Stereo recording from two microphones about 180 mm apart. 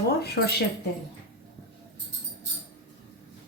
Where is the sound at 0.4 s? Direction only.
75° left (ahead or behind).